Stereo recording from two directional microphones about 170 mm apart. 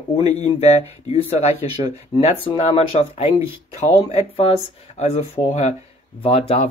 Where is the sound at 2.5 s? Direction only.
35° left (ahead or behind).